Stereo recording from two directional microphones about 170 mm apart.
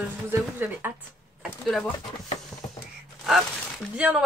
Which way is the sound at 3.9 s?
5° right (ahead or behind).